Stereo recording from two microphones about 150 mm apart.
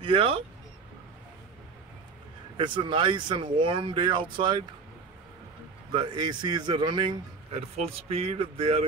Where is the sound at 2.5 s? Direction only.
35° right (ahead or behind).